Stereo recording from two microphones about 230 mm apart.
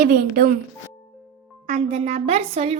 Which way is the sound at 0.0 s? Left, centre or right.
Right.